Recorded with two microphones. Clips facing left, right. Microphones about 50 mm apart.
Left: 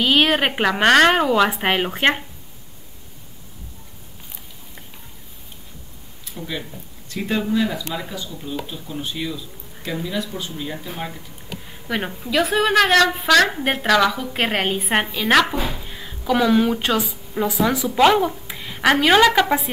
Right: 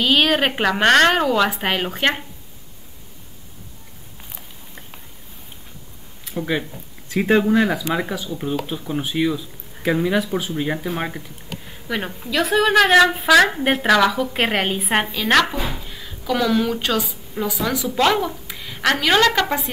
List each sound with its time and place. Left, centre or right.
0.0 s a woman's voice: centre
0.7 s a woman's voice: centre
6.3 s speech: right
7.2 s speech: right
8.6 s speech: right
9.1 s speech: right
11.9 s a woman's voice: centre
15.9 s a sound: centre
16.8 s a woman's voice: left
17.8 s a woman's voice: centre